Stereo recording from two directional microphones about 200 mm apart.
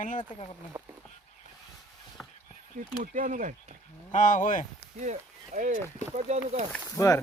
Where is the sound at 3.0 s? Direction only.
40° right (ahead or behind).